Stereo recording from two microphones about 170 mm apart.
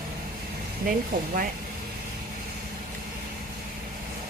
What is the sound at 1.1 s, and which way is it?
Speech, 55° right (ahead or behind).